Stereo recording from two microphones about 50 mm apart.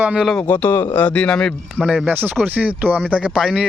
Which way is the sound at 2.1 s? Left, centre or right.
Right.